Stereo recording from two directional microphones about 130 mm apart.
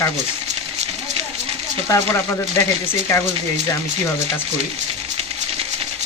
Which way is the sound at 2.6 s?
25° left (ahead or behind).